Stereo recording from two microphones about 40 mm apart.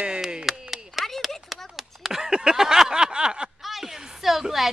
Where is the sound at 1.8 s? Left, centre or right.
Centre.